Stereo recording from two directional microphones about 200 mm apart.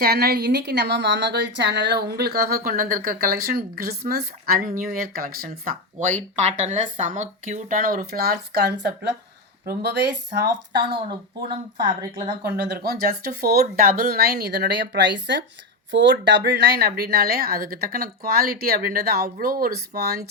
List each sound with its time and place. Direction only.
0.0 s a woman's voice: 50° right (ahead or behind)
10.3 s speech: 20° right (ahead or behind)
12.5 s a woman's voice: 55° right (ahead or behind)